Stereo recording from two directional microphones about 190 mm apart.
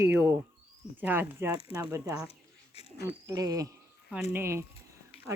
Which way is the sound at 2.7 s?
30° left (ahead or behind).